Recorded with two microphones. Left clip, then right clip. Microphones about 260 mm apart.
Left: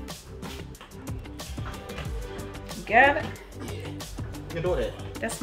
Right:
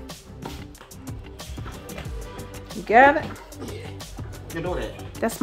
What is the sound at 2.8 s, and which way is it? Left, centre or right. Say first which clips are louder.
Speech: right 5 dB; centre.